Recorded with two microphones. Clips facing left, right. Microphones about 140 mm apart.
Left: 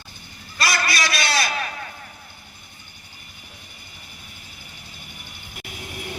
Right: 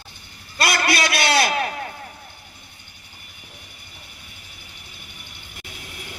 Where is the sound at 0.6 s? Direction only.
60° right (ahead or behind).